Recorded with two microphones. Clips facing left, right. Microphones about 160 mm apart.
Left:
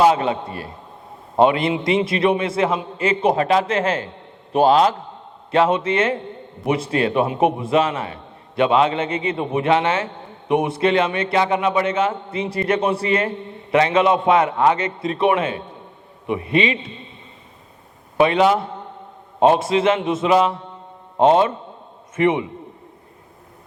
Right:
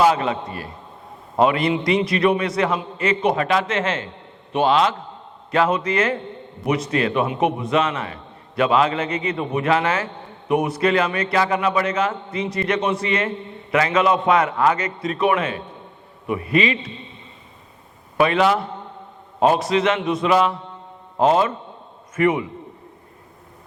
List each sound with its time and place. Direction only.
0.0 s a man's voice: 30° left (ahead or behind)
5.5 s a man's voice: 30° left (ahead or behind)
18.2 s a man's voice: 30° left (ahead or behind)